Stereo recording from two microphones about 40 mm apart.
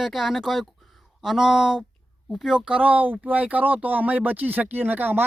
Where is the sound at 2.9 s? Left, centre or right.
Right.